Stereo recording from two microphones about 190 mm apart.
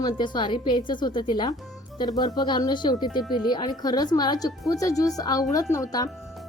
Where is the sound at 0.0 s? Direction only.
25° left (ahead or behind).